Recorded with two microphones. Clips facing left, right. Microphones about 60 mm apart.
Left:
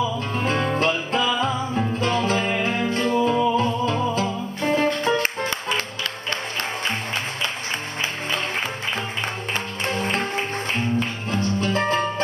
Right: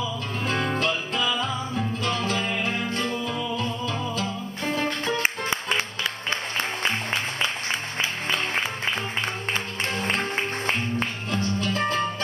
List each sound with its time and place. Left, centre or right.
0.4 s music: left
11.2 s music: left